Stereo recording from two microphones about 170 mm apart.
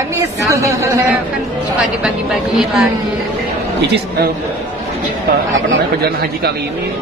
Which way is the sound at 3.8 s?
75° right (ahead or behind).